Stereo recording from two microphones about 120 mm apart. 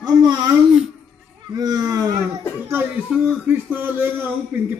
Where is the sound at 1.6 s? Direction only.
35° right (ahead or behind).